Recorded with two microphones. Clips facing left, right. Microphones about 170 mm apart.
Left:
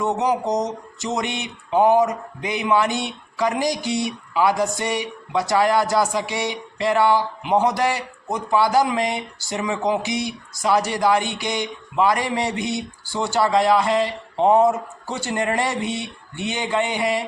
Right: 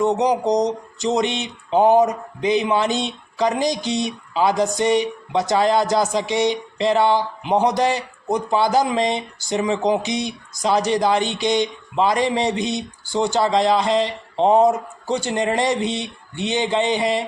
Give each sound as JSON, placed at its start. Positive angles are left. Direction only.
{"t": 0.0, "sound": "speech", "side_deg": -20}